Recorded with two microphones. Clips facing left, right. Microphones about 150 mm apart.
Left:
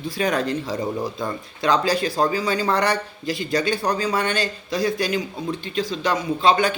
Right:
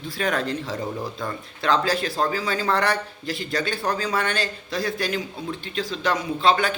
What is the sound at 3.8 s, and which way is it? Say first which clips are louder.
Speech: left 2 dB; 10° left (ahead or behind).